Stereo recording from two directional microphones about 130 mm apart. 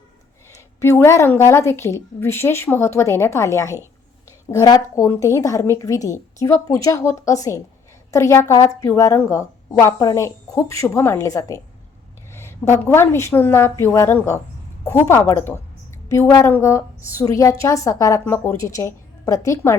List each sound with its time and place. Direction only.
0.5 s a woman's voice: 20° left (ahead or behind)